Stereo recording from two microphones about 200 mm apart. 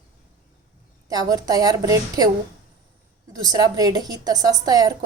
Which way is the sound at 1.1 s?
20° right (ahead or behind).